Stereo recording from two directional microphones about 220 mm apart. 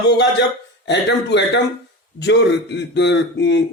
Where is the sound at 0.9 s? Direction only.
50° left (ahead or behind).